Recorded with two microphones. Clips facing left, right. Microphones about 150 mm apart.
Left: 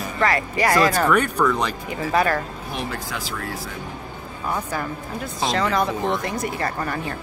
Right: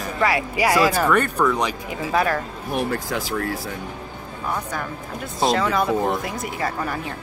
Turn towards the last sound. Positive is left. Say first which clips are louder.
# even
turn(degrees=-5)  # may be behind; listen again after turning